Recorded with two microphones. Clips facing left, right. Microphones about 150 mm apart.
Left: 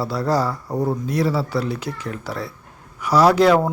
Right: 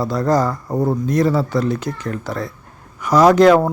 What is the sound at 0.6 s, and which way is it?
Speech, 10° right (ahead or behind).